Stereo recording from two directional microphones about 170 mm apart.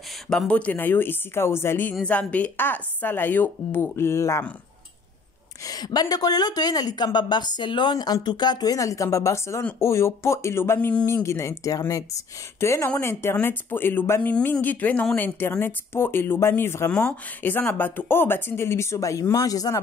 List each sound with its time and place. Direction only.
0.3 s speech: 5° left (ahead or behind)
5.7 s speech: 25° left (ahead or behind)